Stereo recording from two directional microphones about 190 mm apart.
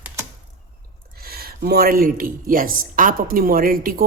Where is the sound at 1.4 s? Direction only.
55° right (ahead or behind).